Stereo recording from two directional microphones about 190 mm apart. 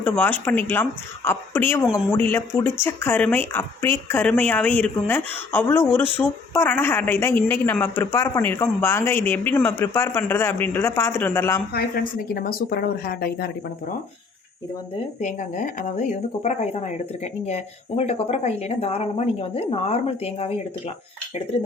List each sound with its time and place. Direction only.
0.0 s speech: 10° left (ahead or behind)
11.7 s speech: 55° left (ahead or behind)
15.2 s speech: 40° left (ahead or behind)